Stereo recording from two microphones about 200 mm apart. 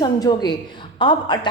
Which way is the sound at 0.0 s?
20° left (ahead or behind).